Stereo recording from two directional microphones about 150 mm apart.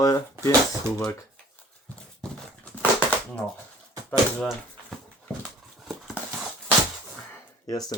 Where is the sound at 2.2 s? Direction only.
10° left (ahead or behind).